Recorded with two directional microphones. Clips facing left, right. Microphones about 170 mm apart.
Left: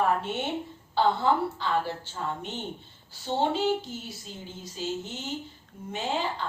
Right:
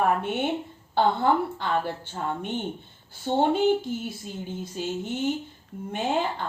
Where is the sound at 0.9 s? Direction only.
55° right (ahead or behind).